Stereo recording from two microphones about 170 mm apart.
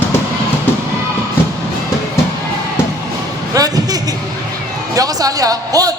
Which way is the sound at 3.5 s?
20° right (ahead or behind).